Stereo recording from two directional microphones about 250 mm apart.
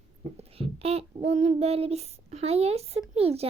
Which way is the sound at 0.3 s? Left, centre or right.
Right.